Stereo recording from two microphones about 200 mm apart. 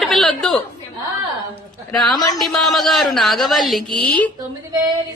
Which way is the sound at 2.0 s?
20° left (ahead or behind).